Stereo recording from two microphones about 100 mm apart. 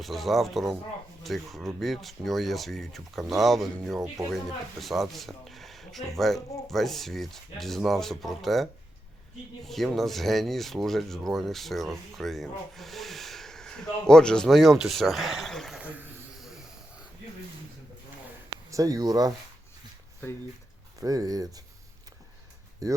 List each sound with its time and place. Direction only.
0.0 s speech: centre (ahead or behind)
9.6 s speech: centre (ahead or behind)
16.0 s a sound: 20° right (ahead or behind)
18.7 s speech: 35° right (ahead or behind)
21.0 s speech: 35° right (ahead or behind)
22.8 s speech: 35° right (ahead or behind)